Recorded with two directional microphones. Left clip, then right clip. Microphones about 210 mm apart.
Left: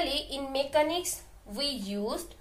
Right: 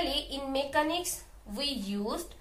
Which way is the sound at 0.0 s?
40° left (ahead or behind).